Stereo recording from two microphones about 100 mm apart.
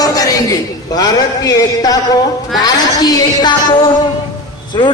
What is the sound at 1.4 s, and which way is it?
A man's voice, 40° left (ahead or behind).